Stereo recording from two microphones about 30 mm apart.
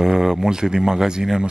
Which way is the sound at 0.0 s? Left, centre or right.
Centre.